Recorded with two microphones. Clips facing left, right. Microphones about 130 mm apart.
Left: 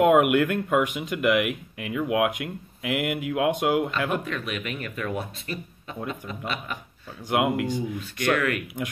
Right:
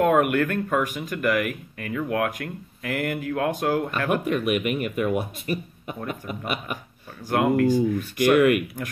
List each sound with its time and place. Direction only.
0.0 s speech: 15° left (ahead or behind)
4.2 s speech: 15° right (ahead or behind)
7.2 s speech: 15° left (ahead or behind)
8.3 s speech: 15° right (ahead or behind)